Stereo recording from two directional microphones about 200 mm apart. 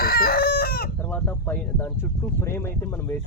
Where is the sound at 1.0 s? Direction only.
10° left (ahead or behind).